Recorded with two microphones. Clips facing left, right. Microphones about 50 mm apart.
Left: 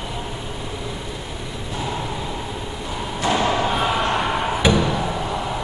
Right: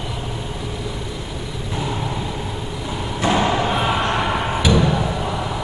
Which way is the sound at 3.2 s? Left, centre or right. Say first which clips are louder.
Right 1 dB; centre.